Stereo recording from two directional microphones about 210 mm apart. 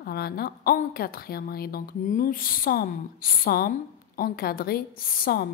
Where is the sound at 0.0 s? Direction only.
50° left (ahead or behind).